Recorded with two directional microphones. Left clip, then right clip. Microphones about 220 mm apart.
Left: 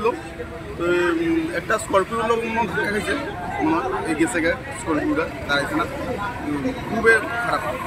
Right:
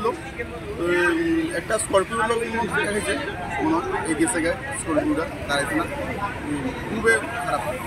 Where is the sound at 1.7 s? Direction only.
Centre (ahead or behind).